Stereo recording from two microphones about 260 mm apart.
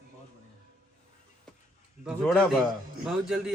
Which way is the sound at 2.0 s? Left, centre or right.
Centre.